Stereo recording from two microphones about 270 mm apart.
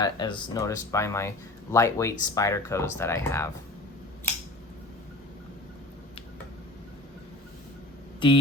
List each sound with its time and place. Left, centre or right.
0.0 s speech: centre
8.2 s speech: centre